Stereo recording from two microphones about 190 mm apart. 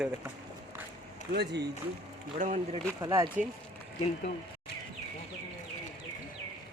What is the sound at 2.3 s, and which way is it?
Speech, 40° right (ahead or behind).